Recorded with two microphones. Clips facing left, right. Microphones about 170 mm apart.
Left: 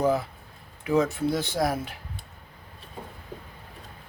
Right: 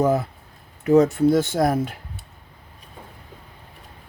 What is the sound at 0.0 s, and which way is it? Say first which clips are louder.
Speech: right 4 dB; 50° right (ahead or behind).